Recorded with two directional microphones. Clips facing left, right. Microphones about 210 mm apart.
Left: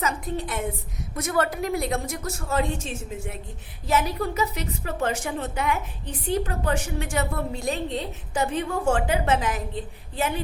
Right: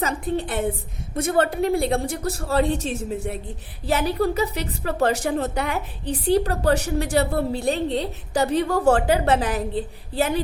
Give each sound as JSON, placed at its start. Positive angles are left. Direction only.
{"t": 0.0, "sound": "a woman's voice", "side_deg": -30}